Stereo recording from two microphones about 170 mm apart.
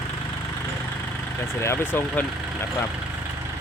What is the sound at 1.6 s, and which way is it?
Speech, 15° left (ahead or behind).